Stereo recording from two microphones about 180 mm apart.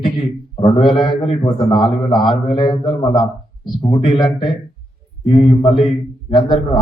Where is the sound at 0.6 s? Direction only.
25° left (ahead or behind).